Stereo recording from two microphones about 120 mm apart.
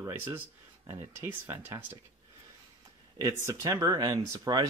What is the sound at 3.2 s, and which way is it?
Speech, 30° right (ahead or behind).